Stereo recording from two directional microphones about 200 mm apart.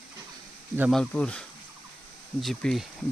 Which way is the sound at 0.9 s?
5° left (ahead or behind).